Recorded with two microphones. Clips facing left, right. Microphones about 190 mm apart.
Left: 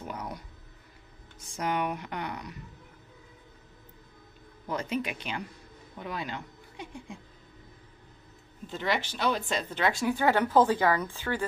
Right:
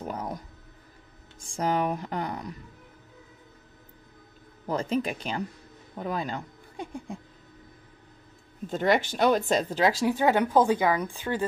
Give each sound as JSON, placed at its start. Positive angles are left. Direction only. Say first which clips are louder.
{"t": 0.0, "sound": "a sound", "louder": "right 4 dB", "side_deg": -30}
{"t": 1.6, "sound": "speech", "louder": "right 4 dB", "side_deg": -35}
{"t": 4.6, "sound": "speech", "louder": "right 4 dB", "side_deg": -35}
{"t": 8.6, "sound": "speech", "louder": "right 7 dB", "side_deg": -50}
{"t": 10.1, "sound": "a woman's voice", "louder": "right 1 dB", "side_deg": -15}